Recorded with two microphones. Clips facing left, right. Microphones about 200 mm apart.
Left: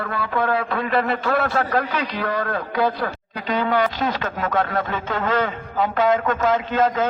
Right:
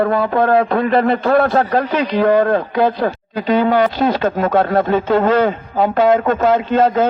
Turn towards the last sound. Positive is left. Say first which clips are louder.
# right 6 dB
turn(degrees=-30)  # may be behind; listen again after turning